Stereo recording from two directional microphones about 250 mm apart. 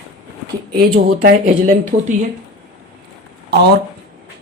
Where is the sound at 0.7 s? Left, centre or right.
Right.